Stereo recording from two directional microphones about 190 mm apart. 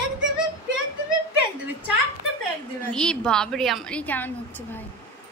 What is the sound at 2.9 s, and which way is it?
A woman's voice, 5° left (ahead or behind).